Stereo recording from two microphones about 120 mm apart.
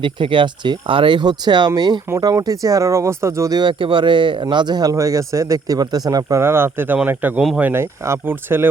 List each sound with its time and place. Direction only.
0.0 s speech: 45° right (ahead or behind); by 3.6 s 25° right (ahead or behind)
3.6 s speech: 45° right (ahead or behind)
6.4 s speech: 20° right (ahead or behind)